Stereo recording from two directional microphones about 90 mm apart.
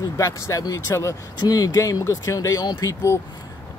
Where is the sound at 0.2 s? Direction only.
40° left (ahead or behind).